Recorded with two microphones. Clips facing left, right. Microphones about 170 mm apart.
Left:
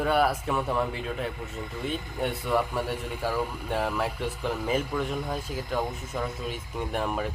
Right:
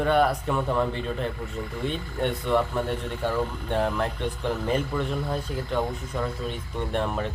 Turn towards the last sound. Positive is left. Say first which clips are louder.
# right 2 dB
turn(degrees=10)  # may be behind; listen again after turning